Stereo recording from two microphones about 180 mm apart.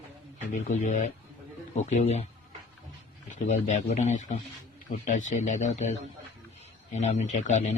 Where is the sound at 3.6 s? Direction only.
40° left (ahead or behind).